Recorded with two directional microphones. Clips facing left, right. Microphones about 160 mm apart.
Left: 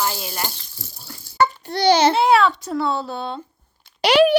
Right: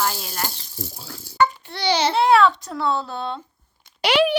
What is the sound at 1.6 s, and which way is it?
Speech, 45° left (ahead or behind).